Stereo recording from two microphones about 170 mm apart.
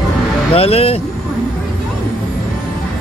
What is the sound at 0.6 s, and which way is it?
Speech, 35° left (ahead or behind).